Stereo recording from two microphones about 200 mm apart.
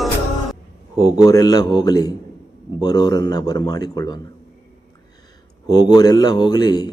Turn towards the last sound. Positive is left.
turn(degrees=20)  # may be behind; listen again after turning